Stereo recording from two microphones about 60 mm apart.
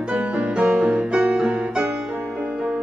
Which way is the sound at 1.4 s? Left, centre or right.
Centre.